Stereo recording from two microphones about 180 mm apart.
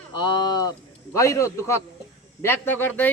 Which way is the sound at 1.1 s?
15° left (ahead or behind).